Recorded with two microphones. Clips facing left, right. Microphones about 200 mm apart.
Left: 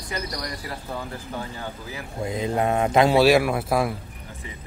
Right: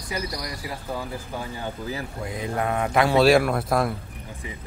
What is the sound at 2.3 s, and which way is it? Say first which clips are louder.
Speech: left 4 dB; 25° left (ahead or behind).